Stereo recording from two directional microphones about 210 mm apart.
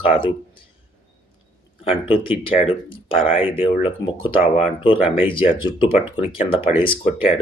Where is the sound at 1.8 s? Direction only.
25° left (ahead or behind).